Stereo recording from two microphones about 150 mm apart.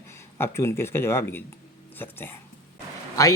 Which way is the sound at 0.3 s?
15° left (ahead or behind).